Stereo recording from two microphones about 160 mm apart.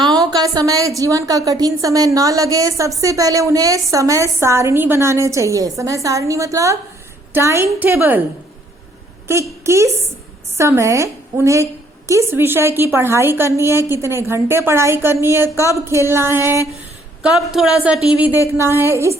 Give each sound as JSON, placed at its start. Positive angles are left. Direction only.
{"t": 0.0, "sound": "a woman's voice", "side_deg": -25}
{"t": 9.2, "sound": "a woman's voice", "side_deg": -15}
{"t": 17.2, "sound": "a woman's voice", "side_deg": 0}